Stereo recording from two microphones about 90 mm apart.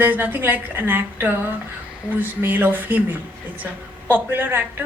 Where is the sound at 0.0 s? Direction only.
20° right (ahead or behind).